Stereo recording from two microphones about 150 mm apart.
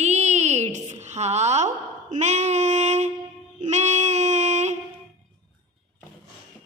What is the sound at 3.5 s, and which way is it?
Child singing, 50° right (ahead or behind).